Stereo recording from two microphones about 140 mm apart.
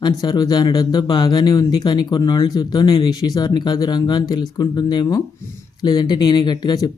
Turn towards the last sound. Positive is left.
turn(degrees=30)  # may be behind; listen again after turning